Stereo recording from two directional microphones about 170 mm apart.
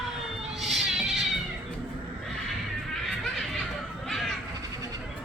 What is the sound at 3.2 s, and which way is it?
Music, 5° left (ahead or behind).